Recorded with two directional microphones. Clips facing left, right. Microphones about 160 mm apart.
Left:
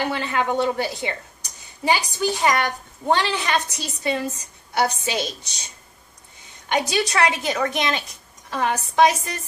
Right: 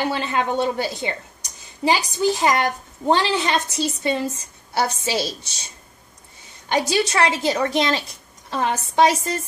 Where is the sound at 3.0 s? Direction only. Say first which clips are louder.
Right 2 dB; 25° right (ahead or behind).